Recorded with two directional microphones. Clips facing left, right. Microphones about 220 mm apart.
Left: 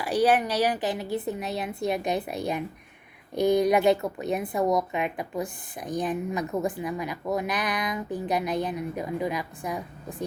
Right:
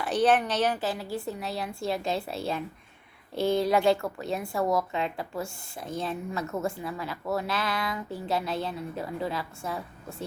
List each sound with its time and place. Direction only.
0.0 s a woman's voice: 10° left (ahead or behind)